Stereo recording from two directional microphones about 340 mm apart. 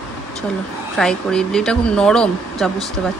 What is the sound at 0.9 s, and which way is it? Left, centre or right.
Speech, centre.